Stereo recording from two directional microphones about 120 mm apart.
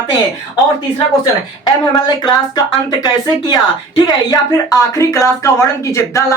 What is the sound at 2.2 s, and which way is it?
Speech, 35° left (ahead or behind).